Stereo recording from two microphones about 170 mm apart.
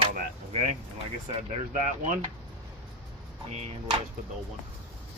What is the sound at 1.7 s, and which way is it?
Speech, 45° right (ahead or behind).